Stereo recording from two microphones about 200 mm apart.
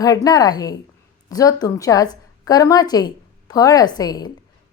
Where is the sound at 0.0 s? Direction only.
20° left (ahead or behind).